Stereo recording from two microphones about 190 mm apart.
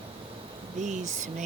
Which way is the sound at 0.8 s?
40° right (ahead or behind).